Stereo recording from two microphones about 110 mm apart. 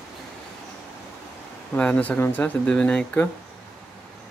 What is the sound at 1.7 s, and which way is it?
Speech, 10° left (ahead or behind).